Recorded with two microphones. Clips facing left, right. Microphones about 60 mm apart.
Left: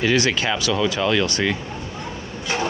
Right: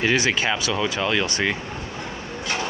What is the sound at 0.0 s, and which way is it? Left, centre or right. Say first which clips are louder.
Speech: left 1 dB; centre.